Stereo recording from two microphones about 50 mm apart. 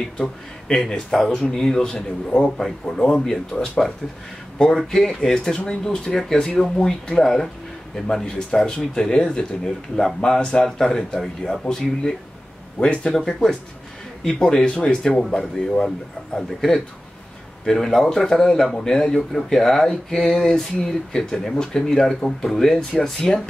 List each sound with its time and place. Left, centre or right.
0.2 s speech: centre
4.7 s speech: centre
13.2 s speech: centre
16.3 s speech: centre